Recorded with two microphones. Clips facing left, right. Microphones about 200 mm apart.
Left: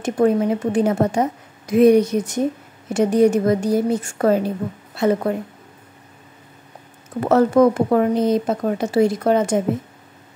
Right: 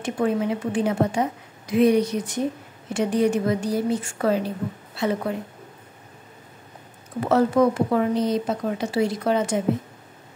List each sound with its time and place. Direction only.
0.0 s speech: 45° left (ahead or behind)
7.2 s speech: 50° left (ahead or behind)